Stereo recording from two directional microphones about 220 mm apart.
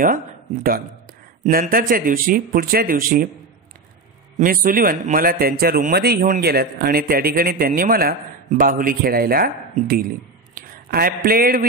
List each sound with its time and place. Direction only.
1.4 s a man's voice: 40° right (ahead or behind)
4.4 s a man's voice: 40° right (ahead or behind)